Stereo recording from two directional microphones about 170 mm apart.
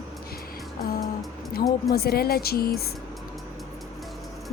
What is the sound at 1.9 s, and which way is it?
Speech, 65° left (ahead or behind).